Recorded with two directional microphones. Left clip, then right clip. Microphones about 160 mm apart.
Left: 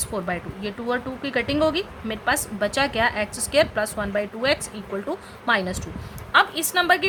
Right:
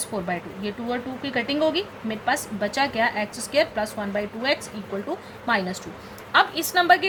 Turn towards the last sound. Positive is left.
turn(degrees=15)  # may be behind; listen again after turning